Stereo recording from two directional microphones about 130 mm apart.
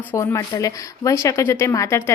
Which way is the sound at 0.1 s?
25° left (ahead or behind).